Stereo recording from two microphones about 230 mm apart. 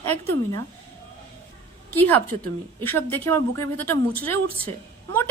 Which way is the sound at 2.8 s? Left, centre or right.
Centre.